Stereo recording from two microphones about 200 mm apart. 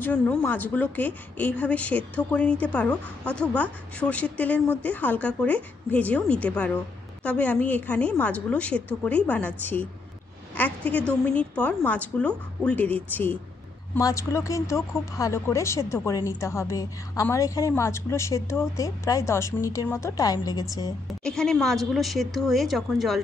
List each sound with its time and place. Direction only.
0.0 s speech: 10° left (ahead or behind)
21.2 s a woman's voice: 5° left (ahead or behind)